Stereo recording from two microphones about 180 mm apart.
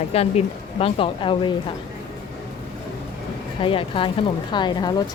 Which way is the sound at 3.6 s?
30° left (ahead or behind).